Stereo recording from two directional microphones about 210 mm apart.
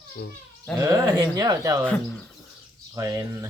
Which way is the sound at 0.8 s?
15° right (ahead or behind).